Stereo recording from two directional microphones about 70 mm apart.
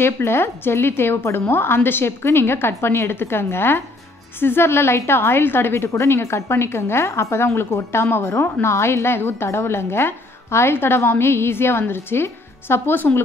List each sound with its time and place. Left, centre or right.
0.0 s a woman's voice: left